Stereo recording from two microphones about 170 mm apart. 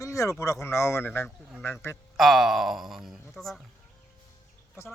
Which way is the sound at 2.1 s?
Centre (ahead or behind).